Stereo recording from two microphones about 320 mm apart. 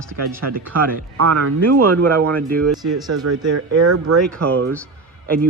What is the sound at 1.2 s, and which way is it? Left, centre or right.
Speech, right.